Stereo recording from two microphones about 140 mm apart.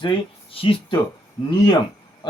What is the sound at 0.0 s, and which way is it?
Speech, 40° left (ahead or behind).